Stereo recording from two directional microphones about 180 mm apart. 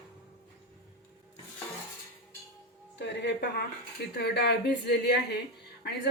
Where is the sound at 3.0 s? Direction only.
75° left (ahead or behind).